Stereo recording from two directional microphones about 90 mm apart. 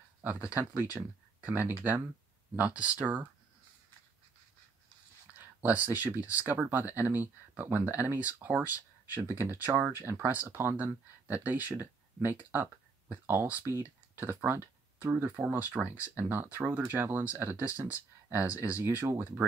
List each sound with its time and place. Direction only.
0.2 s speech: 20° right (ahead or behind)
5.2 s a sound: 20° right (ahead or behind)
6.1 s speech: 20° right (ahead or behind)